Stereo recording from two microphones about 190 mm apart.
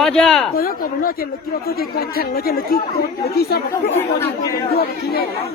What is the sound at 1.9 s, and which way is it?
Speech, 50° left (ahead or behind).